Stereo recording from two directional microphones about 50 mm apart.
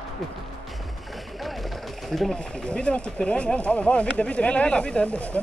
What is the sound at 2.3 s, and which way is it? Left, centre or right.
Speech, centre.